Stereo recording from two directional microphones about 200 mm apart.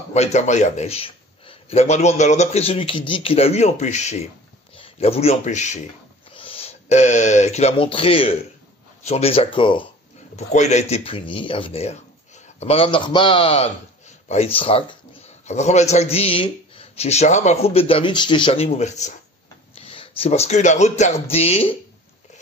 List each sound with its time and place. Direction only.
0.1 s a man's voice: 35° left (ahead or behind)
10.3 s a man's voice: 35° left (ahead or behind)